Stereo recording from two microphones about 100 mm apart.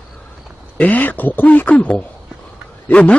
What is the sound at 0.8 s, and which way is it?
Speech, 15° left (ahead or behind).